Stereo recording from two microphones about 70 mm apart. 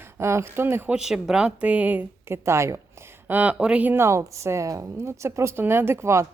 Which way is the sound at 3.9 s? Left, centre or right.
Right.